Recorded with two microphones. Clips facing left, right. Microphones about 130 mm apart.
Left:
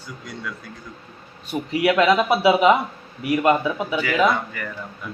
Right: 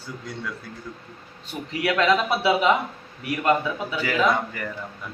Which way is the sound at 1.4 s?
10° left (ahead or behind).